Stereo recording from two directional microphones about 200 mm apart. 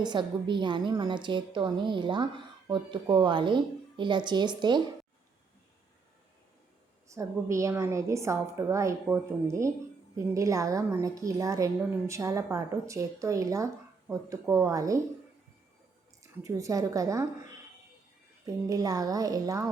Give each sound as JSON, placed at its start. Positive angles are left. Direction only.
{"t": 0.0, "sound": "a woman's voice", "side_deg": -20}
{"t": 7.1, "sound": "a woman's voice", "side_deg": -15}
{"t": 16.4, "sound": "a woman's voice", "side_deg": -15}
{"t": 18.4, "sound": "a woman's voice", "side_deg": -20}